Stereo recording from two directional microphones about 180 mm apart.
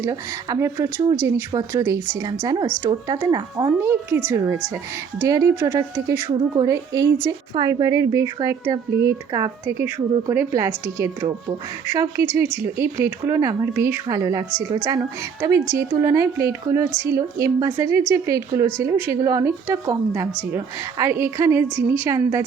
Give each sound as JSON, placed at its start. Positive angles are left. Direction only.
{"t": 0.0, "sound": "a woman's voice", "side_deg": -20}